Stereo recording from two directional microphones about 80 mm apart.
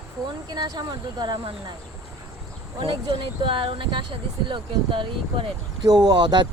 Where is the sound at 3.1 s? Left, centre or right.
Right.